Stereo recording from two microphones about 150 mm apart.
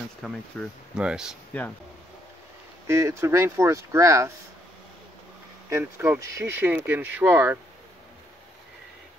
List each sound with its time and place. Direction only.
0.2 s speech: centre (ahead or behind)
1.5 s speech: 10° left (ahead or behind)
2.9 s speech: 20° right (ahead or behind)
5.7 s speech: 15° right (ahead or behind)